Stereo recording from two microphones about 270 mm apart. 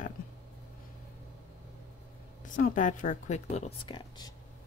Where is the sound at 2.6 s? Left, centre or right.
Left.